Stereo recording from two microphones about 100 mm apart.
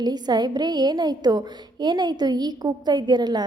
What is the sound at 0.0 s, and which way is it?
A woman's voice, 45° right (ahead or behind).